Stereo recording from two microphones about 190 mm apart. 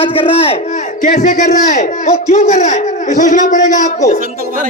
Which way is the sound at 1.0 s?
45° left (ahead or behind).